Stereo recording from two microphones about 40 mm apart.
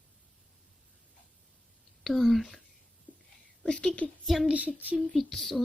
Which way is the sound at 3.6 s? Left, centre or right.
Left.